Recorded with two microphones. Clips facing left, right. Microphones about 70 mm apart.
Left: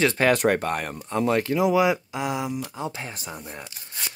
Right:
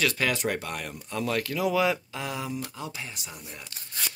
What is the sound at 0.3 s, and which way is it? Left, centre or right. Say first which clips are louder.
Speech: left 8 dB; left.